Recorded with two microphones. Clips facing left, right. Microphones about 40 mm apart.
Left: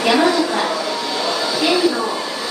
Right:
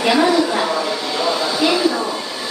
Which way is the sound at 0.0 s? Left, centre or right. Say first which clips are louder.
Even; centre.